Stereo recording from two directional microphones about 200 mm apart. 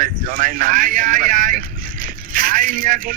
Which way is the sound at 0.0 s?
45° right (ahead or behind).